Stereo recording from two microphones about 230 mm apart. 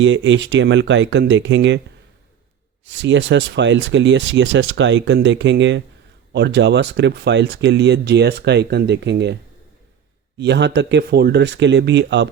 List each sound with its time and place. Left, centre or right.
0.0 s speech: right
2.8 s speech: right